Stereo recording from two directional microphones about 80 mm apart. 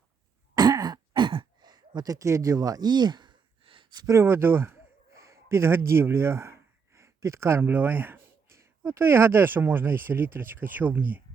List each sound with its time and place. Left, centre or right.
0.5 s throat clearing: right
2.1 s speech: right
4.0 s speech: right